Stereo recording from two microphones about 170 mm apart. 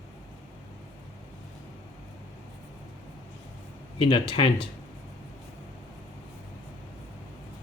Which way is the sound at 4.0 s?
30° left (ahead or behind).